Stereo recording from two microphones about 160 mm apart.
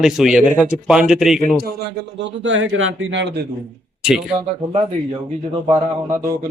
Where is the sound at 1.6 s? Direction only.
90° right.